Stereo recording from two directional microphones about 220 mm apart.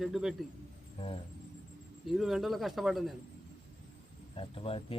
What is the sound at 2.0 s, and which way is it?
Speech, centre (ahead or behind).